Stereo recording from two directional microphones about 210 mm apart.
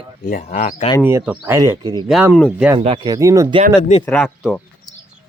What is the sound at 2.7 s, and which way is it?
Speech, 25° right (ahead or behind).